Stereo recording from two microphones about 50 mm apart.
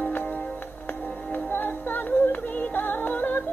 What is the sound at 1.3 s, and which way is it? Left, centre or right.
Music, left.